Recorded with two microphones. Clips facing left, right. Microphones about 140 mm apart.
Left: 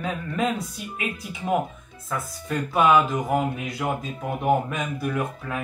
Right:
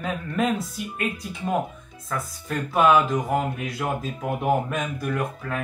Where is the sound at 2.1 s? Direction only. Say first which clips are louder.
Left 1 dB; centre (ahead or behind).